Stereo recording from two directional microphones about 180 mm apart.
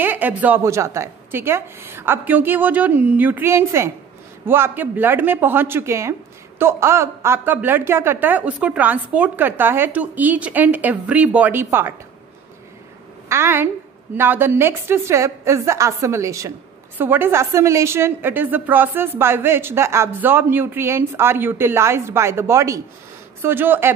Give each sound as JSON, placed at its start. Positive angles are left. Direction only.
{"t": 0.0, "sound": "a woman's voice", "side_deg": -10}
{"t": 13.3, "sound": "a woman's voice", "side_deg": -15}